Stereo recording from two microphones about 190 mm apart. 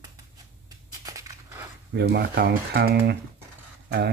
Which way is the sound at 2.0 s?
60° right (ahead or behind).